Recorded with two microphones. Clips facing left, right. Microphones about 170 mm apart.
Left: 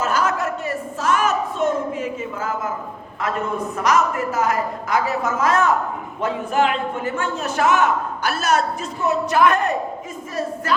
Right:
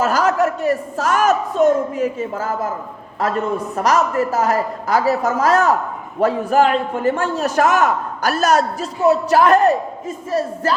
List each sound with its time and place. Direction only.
0.0 s a man's voice: 35° right (ahead or behind)
3.8 s a man's voice: 30° right (ahead or behind)